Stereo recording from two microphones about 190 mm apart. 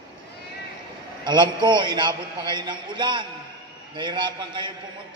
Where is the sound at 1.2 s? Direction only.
25° right (ahead or behind).